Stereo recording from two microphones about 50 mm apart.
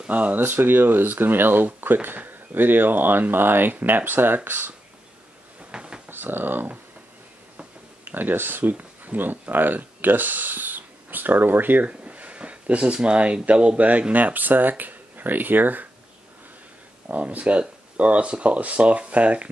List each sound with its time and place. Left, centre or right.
0.1 s speech: right
0.4 s speech: right
5.7 s a sound: centre
6.0 s speech: right
8.0 s speech: right
11.9 s speech: right
17.1 s speech: right